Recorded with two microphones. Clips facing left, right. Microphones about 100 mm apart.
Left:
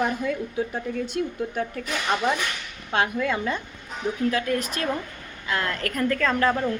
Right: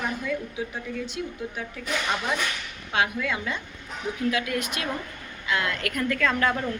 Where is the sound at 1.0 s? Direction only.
50° left (ahead or behind).